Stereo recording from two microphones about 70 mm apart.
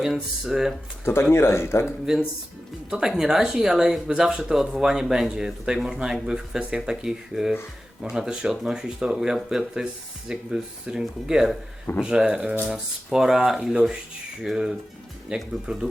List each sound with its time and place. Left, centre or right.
0.0 s speech: centre
1.0 s speech: left
2.1 s speech: centre